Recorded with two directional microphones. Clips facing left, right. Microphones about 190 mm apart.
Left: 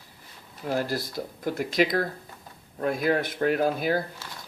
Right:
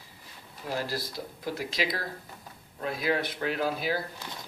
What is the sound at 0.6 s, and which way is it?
Speech, 50° left (ahead or behind).